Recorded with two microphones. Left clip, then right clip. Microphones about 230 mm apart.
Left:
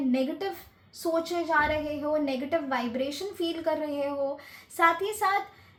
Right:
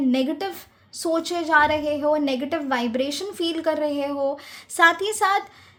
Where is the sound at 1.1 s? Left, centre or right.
Right.